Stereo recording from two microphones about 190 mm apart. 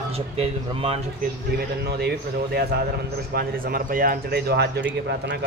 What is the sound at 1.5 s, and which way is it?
Speech, 60° right (ahead or behind).